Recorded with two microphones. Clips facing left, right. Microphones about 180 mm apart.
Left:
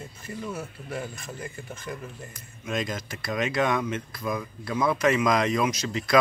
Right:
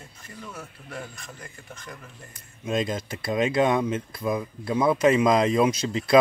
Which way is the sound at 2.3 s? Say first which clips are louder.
Right 5 dB; 30° right (ahead or behind).